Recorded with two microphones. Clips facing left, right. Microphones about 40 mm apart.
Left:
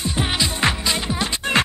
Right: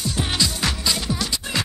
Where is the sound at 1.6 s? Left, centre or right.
Left.